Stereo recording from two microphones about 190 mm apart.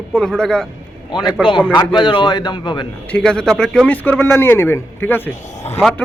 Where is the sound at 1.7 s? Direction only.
25° left (ahead or behind).